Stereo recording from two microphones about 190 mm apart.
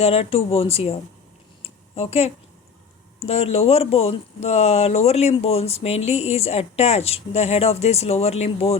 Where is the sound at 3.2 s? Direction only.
30° left (ahead or behind).